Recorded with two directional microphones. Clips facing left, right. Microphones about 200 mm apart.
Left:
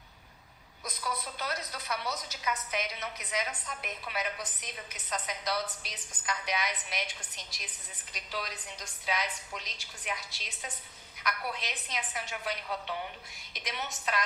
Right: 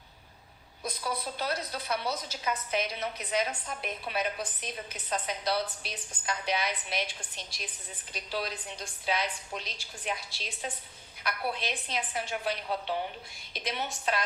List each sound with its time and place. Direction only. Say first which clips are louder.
0.9 s a woman's voice: right 3 dB; 30° right (ahead or behind)